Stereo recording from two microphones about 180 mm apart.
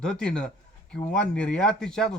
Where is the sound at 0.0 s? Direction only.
5° left (ahead or behind).